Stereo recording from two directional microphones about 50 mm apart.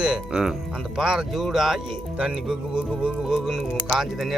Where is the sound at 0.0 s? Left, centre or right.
Centre.